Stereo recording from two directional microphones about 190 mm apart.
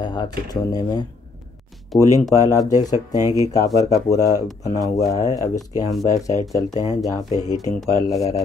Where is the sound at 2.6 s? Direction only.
20° left (ahead or behind).